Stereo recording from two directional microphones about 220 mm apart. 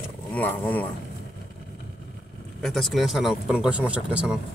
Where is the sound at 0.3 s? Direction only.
10° left (ahead or behind).